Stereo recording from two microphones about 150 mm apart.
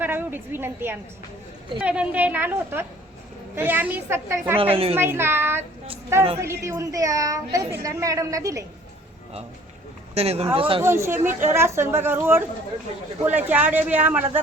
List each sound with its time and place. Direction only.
0.0 s a woman's voice: 15° right (ahead or behind)
4.7 s speech: 40° right (ahead or behind)
4.9 s a woman's voice: 15° right (ahead or behind)
10.2 s speech: 45° right (ahead or behind)
10.8 s a woman's voice: 15° right (ahead or behind)